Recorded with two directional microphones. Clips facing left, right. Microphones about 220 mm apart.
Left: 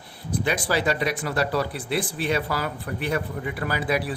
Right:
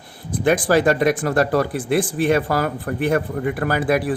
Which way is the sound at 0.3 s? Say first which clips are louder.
Right 8 dB; 50° right (ahead or behind).